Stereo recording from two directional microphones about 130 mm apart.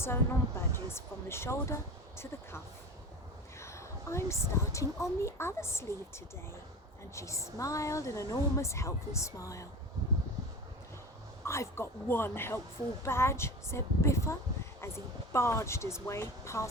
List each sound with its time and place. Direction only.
0.0 s speech: 20° left (ahead or behind)
3.6 s speech: 20° left (ahead or behind)
11.4 s speech: 20° left (ahead or behind)